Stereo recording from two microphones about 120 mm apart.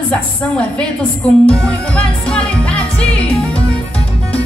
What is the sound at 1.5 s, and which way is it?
Music, 10° left (ahead or behind).